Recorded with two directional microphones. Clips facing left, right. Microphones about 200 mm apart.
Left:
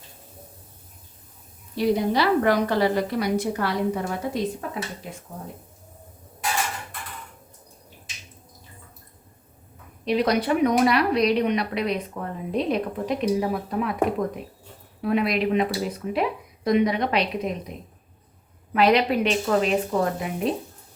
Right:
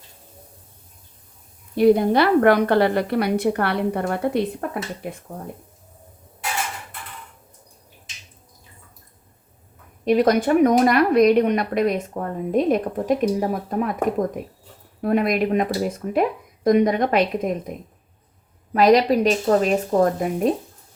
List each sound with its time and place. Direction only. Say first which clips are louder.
1.7 s a woman's voice: right 6 dB; 55° right (ahead or behind)
10.0 s speech: right 5 dB; 45° right (ahead or behind)
18.7 s speech: right 4 dB; 40° right (ahead or behind)